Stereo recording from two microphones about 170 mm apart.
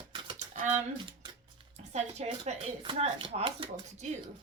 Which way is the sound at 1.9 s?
40° right (ahead or behind).